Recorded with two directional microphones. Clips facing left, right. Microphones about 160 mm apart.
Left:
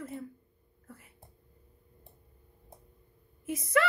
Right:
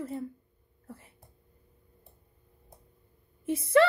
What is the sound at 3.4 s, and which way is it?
Speech, 30° right (ahead or behind).